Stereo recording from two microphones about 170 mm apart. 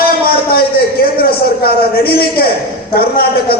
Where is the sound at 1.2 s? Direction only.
65° left (ahead or behind).